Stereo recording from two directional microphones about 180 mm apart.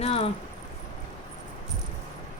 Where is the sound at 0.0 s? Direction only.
35° left (ahead or behind).